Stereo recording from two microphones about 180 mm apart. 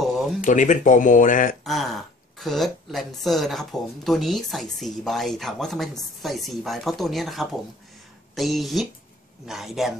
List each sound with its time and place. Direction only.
0.4 s speech: 45° left (ahead or behind)
1.6 s speech: centre (ahead or behind)